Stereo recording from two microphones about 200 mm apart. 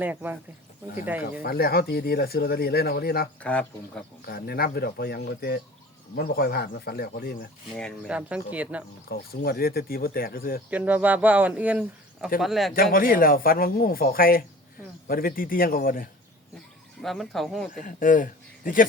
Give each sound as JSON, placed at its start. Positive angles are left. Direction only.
{"t": 0.0, "sound": "a man's voice", "side_deg": -10}
{"t": 1.4, "sound": "speech", "side_deg": 50}
{"t": 3.4, "sound": "speech", "side_deg": 5}
{"t": 4.3, "sound": "speech", "side_deg": 50}
{"t": 7.8, "sound": "speech", "side_deg": 0}
{"t": 9.0, "sound": "speech", "side_deg": 50}
{"t": 10.7, "sound": "a man's voice", "side_deg": -10}
{"t": 12.7, "sound": "speech", "side_deg": 45}
{"t": 17.0, "sound": "speech", "side_deg": 0}
{"t": 17.8, "sound": "speech", "side_deg": 40}